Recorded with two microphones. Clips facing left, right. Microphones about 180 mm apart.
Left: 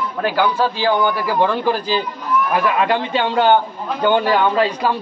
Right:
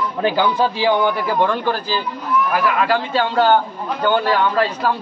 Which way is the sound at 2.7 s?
20° left (ahead or behind).